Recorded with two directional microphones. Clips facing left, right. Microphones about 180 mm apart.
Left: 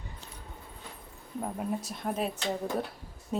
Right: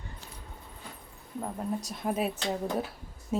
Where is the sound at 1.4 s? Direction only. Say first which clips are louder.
Even; 5° left (ahead or behind).